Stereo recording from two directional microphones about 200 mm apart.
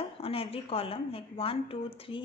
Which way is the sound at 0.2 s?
30° left (ahead or behind).